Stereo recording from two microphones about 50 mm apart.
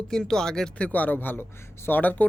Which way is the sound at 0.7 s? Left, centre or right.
Left.